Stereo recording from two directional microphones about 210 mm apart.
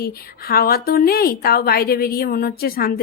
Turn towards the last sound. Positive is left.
turn(degrees=45)  # may be behind; listen again after turning